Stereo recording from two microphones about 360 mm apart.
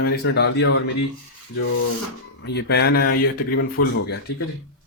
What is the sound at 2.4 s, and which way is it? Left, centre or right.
Speech, left.